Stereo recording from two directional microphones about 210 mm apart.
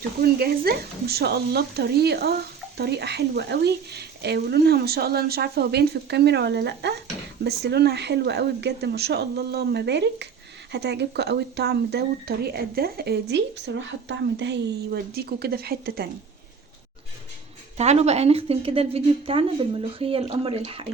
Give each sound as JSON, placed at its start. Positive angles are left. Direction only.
{"t": 0.2, "sound": "speech", "side_deg": -45}
{"t": 17.7, "sound": "speech", "side_deg": -30}